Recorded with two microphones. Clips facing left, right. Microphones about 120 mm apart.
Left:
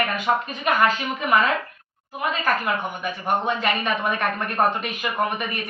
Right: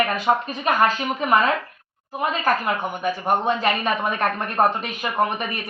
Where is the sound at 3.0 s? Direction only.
35° right (ahead or behind).